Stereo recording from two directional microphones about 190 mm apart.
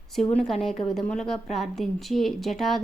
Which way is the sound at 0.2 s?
5° left (ahead or behind).